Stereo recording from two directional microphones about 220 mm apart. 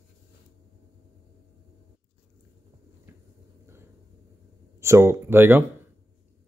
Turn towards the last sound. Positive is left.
turn(degrees=-10)  # may be behind; listen again after turning